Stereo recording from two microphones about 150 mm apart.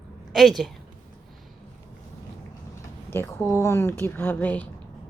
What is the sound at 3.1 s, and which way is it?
Speech, 15° left (ahead or behind).